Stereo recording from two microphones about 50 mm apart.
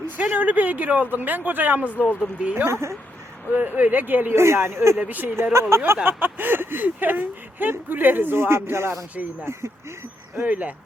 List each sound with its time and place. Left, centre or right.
0.2 s speech: right
1.9 s speech: left
2.4 s speech: right
4.4 s speech: right
4.9 s speech: right
5.4 s speech: right
6.1 s speech: right
8.4 s speech: right
10.4 s speech: right